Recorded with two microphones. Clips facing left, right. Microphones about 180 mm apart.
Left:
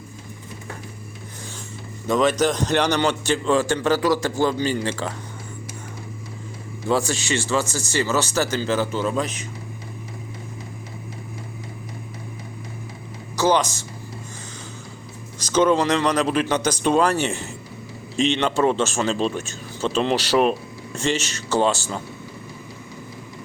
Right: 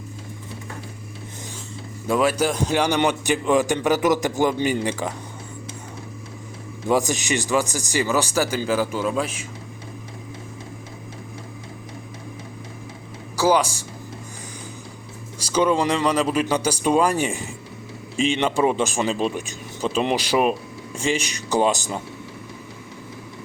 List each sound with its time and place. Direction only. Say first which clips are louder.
2.0 s speech: left 1 dB; 10° right (ahead or behind)
6.8 s speech: right 1 dB; 15° right (ahead or behind)
13.3 s speech: right 1 dB; 10° right (ahead or behind)
15.4 s speech: left 2 dB; 10° right (ahead or behind)